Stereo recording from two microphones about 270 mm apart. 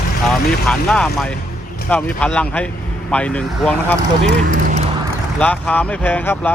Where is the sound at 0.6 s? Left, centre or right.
Centre.